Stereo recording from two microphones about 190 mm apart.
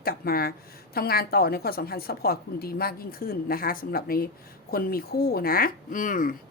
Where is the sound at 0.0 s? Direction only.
50° left (ahead or behind).